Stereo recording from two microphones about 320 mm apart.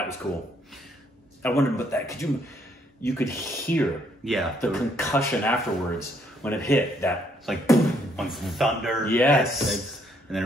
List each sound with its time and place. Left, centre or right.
1.4 s speech: centre